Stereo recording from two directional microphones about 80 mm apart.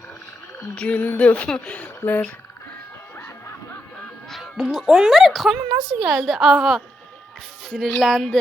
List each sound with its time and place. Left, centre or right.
0.8 s speech: centre
2.0 s speech: left
3.2 s music: left
4.3 s a woman's voice: centre